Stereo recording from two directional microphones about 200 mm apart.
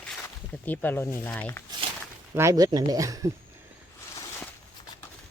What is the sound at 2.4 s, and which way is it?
Speech, 15° right (ahead or behind).